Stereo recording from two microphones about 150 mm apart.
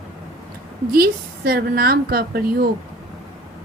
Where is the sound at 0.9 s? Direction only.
90° right.